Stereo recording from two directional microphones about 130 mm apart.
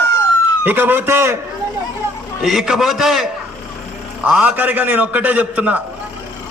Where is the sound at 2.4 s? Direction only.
5° right (ahead or behind).